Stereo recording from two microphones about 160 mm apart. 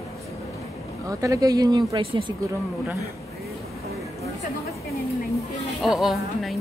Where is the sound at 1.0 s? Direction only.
20° right (ahead or behind).